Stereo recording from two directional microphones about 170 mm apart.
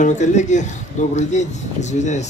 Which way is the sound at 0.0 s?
45° left (ahead or behind).